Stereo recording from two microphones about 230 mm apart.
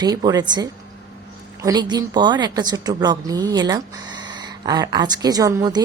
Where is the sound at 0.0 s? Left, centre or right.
Centre.